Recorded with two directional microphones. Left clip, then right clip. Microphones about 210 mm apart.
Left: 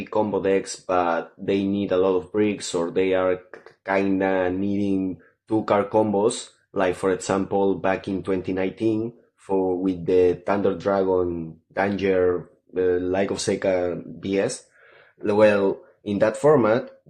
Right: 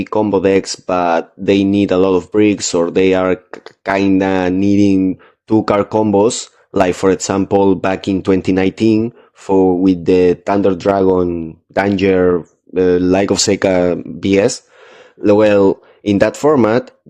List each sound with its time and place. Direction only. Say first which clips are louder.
0.0 s speech: right 9 dB; 40° right (ahead or behind)